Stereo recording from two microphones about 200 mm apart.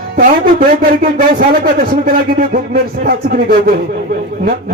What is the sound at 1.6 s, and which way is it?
A man's voice, 50° right (ahead or behind).